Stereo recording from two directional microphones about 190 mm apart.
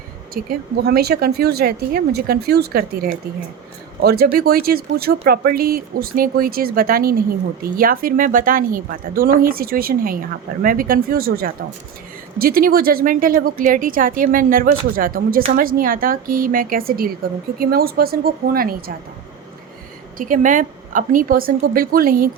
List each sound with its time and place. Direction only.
0.4 s speech: 45° right (ahead or behind)
0.8 s speech: 55° right (ahead or behind)
20.1 s speech: 45° right (ahead or behind)